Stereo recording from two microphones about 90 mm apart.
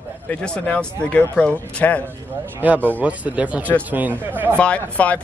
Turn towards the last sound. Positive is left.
turn(degrees=15)  # may be behind; listen again after turning